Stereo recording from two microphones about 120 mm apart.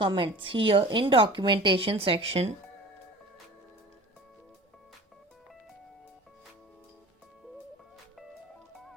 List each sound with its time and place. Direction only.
0.0 s a woman's voice: 45° right (ahead or behind)